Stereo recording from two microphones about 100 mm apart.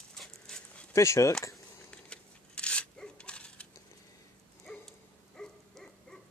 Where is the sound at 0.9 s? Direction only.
30° left (ahead or behind).